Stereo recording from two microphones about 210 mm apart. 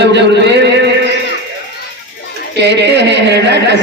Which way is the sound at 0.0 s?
55° right (ahead or behind).